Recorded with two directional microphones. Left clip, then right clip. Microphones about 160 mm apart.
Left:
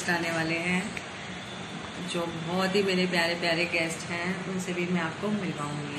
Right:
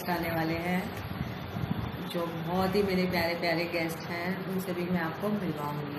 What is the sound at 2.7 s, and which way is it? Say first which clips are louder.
Speech: left 5 dB; centre (ahead or behind).